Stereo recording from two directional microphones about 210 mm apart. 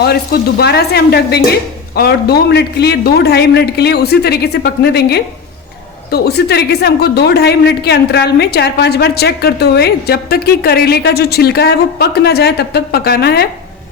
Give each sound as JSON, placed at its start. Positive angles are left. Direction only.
{"t": 0.6, "sound": "speech", "side_deg": 50}